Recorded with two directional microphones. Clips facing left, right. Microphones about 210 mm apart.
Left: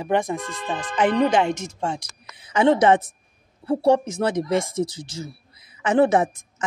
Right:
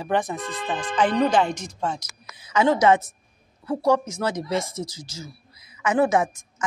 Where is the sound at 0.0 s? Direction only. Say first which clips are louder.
Left 2 dB; 20° left (ahead or behind).